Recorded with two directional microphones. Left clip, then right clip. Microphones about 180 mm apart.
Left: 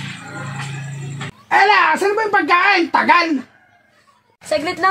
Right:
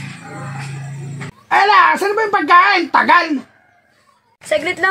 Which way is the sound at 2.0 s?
5° left (ahead or behind).